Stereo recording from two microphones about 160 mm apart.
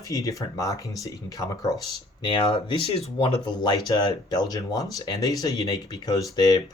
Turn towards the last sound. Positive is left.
turn(degrees=25)  # may be behind; listen again after turning